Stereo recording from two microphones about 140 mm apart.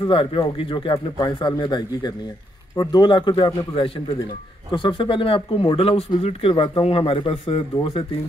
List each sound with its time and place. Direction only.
0.0 s speech: 40° left (ahead or behind)